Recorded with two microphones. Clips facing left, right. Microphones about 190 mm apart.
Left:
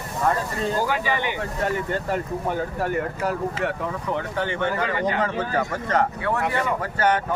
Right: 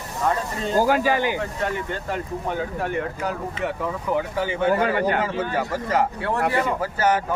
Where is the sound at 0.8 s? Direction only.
40° right (ahead or behind).